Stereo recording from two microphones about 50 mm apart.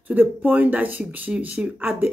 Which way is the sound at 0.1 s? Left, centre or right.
Right.